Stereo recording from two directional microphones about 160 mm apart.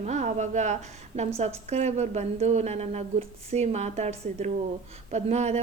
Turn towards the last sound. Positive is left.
turn(degrees=-45)  # may be behind; listen again after turning